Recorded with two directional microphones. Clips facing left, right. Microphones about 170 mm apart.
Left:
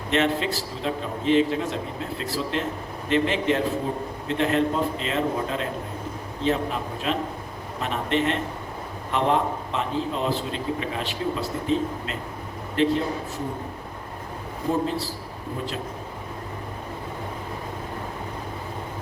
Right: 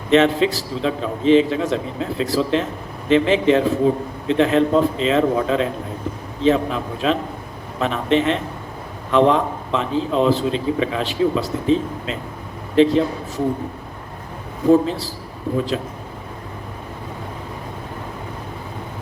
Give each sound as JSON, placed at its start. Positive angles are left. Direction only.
{"t": 0.1, "sound": "a man's voice", "side_deg": -90}
{"t": 14.7, "sound": "a man's voice", "side_deg": -90}